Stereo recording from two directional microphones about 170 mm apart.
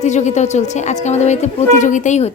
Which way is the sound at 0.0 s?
45° left (ahead or behind).